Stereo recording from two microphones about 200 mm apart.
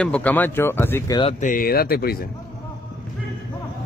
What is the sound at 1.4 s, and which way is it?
Speech, 45° left (ahead or behind).